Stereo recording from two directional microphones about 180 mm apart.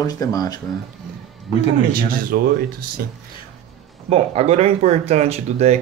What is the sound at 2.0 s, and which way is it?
Speech, 55° right (ahead or behind).